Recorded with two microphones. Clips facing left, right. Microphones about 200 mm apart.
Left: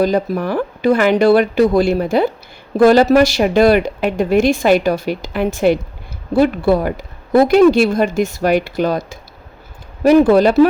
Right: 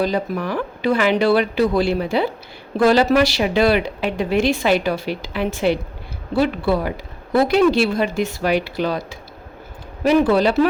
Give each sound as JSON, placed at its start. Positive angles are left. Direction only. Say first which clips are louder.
{"t": 0.0, "sound": "a woman's voice", "louder": "left 5 dB", "side_deg": 45}